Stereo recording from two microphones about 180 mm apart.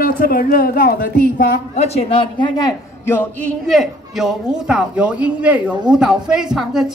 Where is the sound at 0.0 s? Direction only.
55° left (ahead or behind).